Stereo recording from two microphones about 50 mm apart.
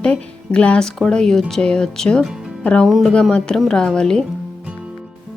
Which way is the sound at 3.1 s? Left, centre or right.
Left.